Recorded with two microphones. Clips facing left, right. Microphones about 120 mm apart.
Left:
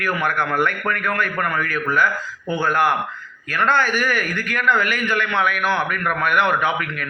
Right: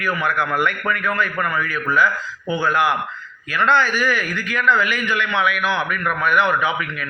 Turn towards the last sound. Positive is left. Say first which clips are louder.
# even
turn(degrees=50)  # may be behind; listen again after turning